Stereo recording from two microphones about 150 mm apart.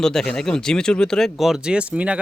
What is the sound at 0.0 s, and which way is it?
Speech, 5° left (ahead or behind).